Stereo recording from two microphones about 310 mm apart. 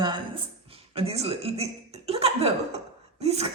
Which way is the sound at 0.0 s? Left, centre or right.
Centre.